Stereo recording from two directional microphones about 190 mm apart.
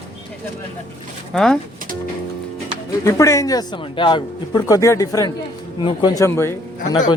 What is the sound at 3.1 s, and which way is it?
Speech, 15° left (ahead or behind).